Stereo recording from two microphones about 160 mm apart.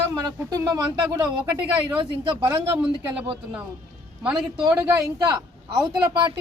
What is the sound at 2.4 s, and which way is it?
Speech, 10° right (ahead or behind).